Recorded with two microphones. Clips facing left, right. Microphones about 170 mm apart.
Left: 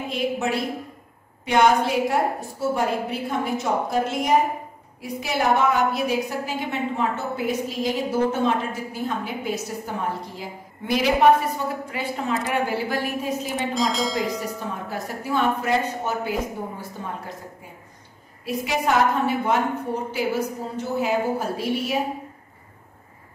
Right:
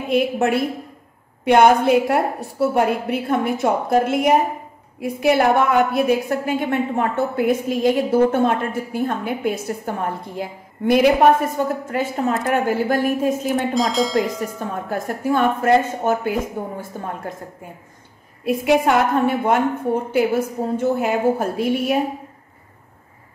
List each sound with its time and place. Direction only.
0.1 s a woman's voice: 60° right (ahead or behind)
13.6 s speech: centre (ahead or behind)
14.9 s a woman's voice: 50° right (ahead or behind)